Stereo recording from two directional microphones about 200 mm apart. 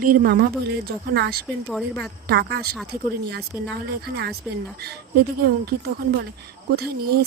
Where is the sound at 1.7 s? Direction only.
Centre (ahead or behind).